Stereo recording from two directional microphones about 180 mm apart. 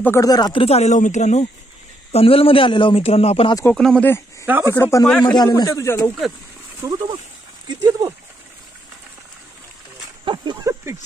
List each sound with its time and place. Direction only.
0.0 s speech: 15° left (ahead or behind); by 3.5 s 30° left (ahead or behind)
3.7 s speech: 5° left (ahead or behind)
4.5 s speech: 10° right (ahead or behind)
4.7 s speech: 15° left (ahead or behind)
5.2 s a man's voice: 25° left (ahead or behind)
6.8 s speech: 20° right (ahead or behind)
10.2 s speech: 25° right (ahead or behind)